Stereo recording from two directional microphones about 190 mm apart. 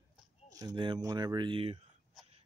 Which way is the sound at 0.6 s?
20° right (ahead or behind).